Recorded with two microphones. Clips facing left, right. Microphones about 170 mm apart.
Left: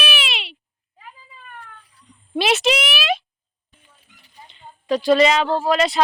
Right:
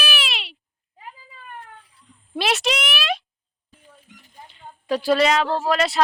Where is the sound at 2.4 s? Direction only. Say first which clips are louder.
Left 4 dB; centre (ahead or behind).